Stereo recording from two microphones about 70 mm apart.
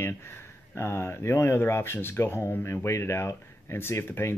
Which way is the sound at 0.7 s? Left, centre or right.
Left.